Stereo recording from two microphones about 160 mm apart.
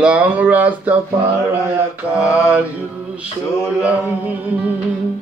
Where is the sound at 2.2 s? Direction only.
15° left (ahead or behind).